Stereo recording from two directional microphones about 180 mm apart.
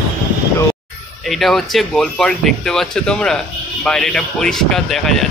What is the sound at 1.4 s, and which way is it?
Speech, centre (ahead or behind).